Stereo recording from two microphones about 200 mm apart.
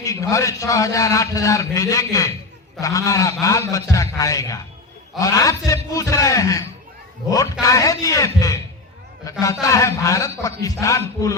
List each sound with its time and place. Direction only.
0.0 s a man's voice: 15° left (ahead or behind)
9.6 s a man's voice: 15° left (ahead or behind)